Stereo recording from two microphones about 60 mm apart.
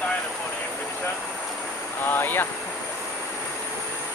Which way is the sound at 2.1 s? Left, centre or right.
Left.